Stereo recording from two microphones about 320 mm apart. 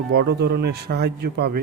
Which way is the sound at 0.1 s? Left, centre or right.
Right.